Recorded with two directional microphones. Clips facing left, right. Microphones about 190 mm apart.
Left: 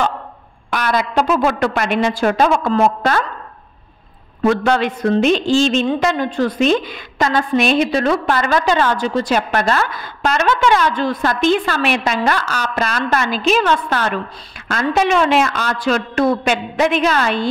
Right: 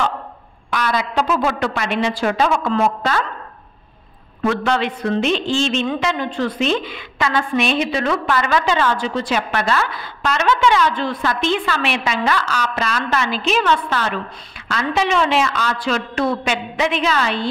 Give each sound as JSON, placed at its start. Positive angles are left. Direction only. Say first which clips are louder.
{"t": 0.7, "sound": "a woman's voice", "louder": "left 2 dB", "side_deg": 45}
{"t": 4.4, "sound": "a woman's voice", "louder": "left 4 dB", "side_deg": 40}